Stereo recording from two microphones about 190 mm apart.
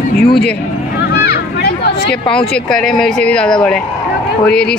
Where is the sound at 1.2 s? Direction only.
55° left (ahead or behind).